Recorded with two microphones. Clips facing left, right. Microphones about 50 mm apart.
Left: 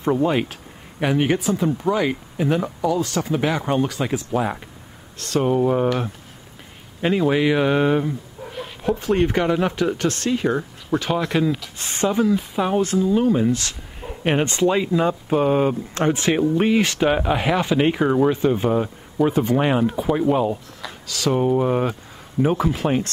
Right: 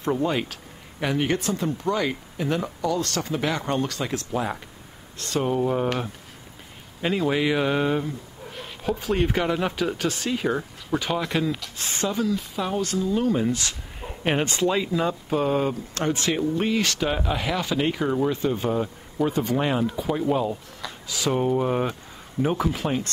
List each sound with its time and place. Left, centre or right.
0.0 s speech: centre
8.5 s speech: centre
11.8 s speech: left; by 14.1 s centre
14.5 s speech: centre
21.3 s speech: centre